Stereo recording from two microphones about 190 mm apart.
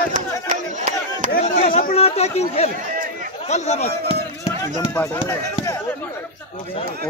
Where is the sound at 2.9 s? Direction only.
45° right (ahead or behind).